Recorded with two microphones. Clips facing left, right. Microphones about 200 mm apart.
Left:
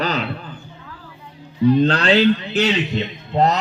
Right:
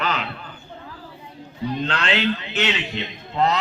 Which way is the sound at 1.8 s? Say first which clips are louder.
Left 8 dB; 35° left (ahead or behind).